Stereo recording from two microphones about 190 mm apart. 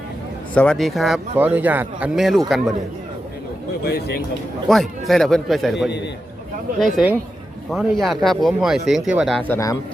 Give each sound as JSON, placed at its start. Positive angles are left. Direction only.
{"t": 0.5, "sound": "speech", "side_deg": 5}
{"t": 3.8, "sound": "speech", "side_deg": 55}
{"t": 4.7, "sound": "speech", "side_deg": 0}
{"t": 6.7, "sound": "speech", "side_deg": 0}
{"t": 9.5, "sound": "speech", "side_deg": 15}